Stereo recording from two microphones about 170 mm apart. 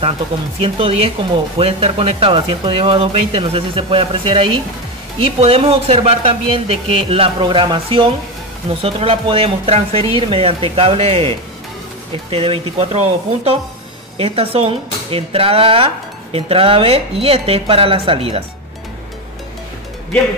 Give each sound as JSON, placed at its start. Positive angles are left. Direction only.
{"t": 0.6, "sound": "speech", "side_deg": -35}